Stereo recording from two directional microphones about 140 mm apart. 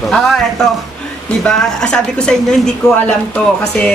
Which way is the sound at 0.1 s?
5° left (ahead or behind).